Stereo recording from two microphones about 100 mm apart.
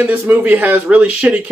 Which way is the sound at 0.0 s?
15° right (ahead or behind).